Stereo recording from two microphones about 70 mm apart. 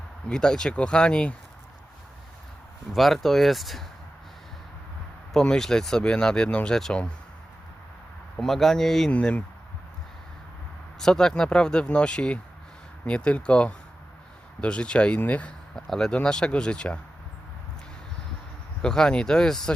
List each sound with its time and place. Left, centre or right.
0.3 s speech: centre
2.9 s speech: centre
5.3 s speech: centre
8.4 s speech: centre
9.1 s speech: centre
11.0 s speech: centre
15.7 s speech: centre
18.8 s speech: centre